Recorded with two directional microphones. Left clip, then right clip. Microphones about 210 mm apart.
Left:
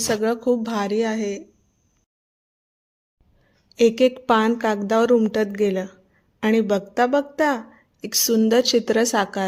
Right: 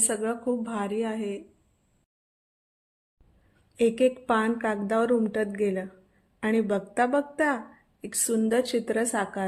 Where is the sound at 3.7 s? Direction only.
25° left (ahead or behind).